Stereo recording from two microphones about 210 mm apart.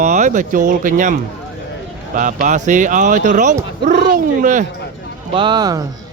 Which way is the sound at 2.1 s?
35° right (ahead or behind).